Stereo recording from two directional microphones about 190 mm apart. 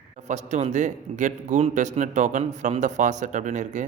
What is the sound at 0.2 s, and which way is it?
A man's voice, 35° right (ahead or behind).